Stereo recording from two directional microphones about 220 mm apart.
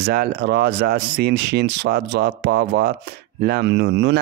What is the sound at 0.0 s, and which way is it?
Speech, 45° right (ahead or behind).